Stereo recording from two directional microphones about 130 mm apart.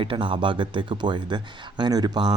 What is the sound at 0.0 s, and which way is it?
Speech, 40° right (ahead or behind).